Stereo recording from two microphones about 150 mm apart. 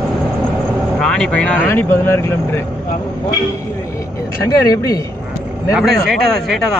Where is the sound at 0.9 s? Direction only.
5° left (ahead or behind).